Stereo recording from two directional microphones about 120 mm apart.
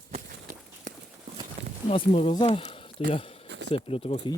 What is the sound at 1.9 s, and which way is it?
Speech, 50° left (ahead or behind).